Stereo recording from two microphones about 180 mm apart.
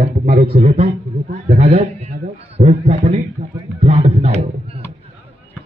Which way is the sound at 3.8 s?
35° right (ahead or behind).